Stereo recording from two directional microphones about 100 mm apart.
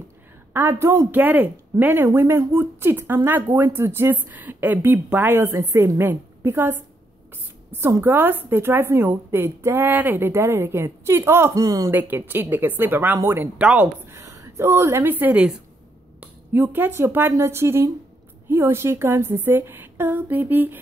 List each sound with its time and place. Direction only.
0.5 s a woman's voice: 25° right (ahead or behind)
8.0 s a woman's voice: 20° right (ahead or behind)
11.9 s a woman's voice: 20° right (ahead or behind)
16.2 s a woman's voice: 20° right (ahead or behind)